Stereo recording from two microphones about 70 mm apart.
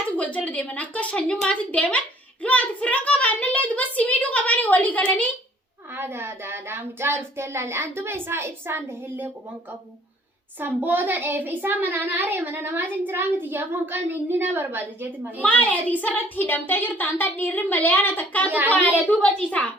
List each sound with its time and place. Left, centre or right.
0.2 s a woman's voice: left
5.9 s child singing: right
10.6 s a child's voice: right
15.4 s a woman's voice: left